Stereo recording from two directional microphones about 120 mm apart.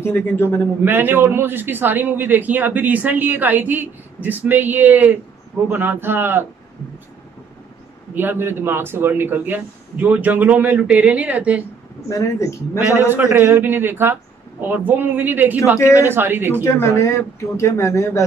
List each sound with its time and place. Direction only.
0.0 s speech: 20° left (ahead or behind)
0.8 s a man's voice: 15° right (ahead or behind)
8.1 s a man's voice: 15° right (ahead or behind)
12.1 s speech: 25° left (ahead or behind)
13.1 s a man's voice: 20° right (ahead or behind)
15.8 s speech: 25° left (ahead or behind)
16.1 s speech: 20° right (ahead or behind)
16.6 s speech: 25° left (ahead or behind)